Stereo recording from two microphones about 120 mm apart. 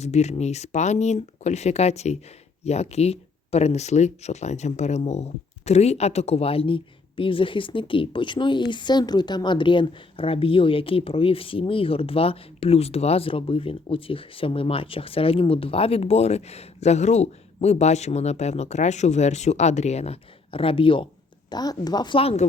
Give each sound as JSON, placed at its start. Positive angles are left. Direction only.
{"t": 0.0, "sound": "speech", "side_deg": 65}
{"t": 21.5, "sound": "a woman's voice", "side_deg": 35}
{"t": 22.2, "sound": "speech", "side_deg": 55}